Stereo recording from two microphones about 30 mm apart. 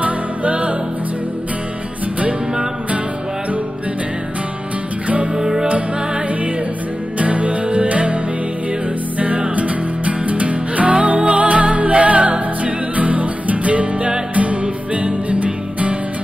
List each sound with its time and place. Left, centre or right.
0.0 s music: right
5.0 s music: right
5.3 s music: right
7.2 s music: right
9.2 s music: right